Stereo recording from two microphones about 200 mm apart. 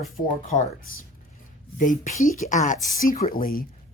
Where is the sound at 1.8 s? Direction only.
40° left (ahead or behind).